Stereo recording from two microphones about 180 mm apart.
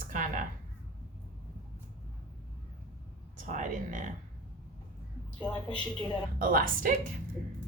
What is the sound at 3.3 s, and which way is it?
Speech, 45° right (ahead or behind).